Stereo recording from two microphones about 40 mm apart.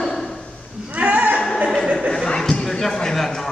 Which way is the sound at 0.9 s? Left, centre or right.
Right.